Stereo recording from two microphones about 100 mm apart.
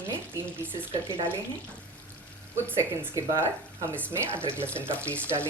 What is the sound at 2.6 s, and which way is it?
Speech, 20° right (ahead or behind).